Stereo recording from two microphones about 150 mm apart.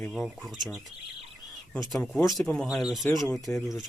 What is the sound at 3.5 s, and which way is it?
Speech, 10° left (ahead or behind).